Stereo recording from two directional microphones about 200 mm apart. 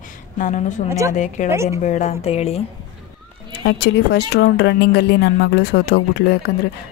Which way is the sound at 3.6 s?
60° left (ahead or behind).